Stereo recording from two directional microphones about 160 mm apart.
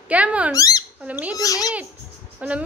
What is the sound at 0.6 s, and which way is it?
Speech, 20° left (ahead or behind).